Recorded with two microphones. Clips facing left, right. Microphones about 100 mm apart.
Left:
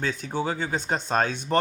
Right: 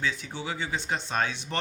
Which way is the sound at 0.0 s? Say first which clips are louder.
Left 5 dB; 45° left (ahead or behind).